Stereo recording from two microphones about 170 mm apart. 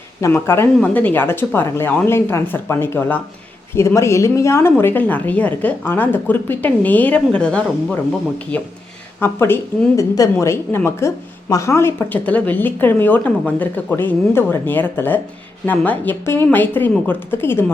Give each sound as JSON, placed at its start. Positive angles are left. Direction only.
{"t": 0.2, "sound": "speech", "side_deg": 15}